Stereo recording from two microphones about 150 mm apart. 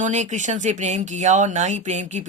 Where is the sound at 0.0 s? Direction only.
50° right (ahead or behind).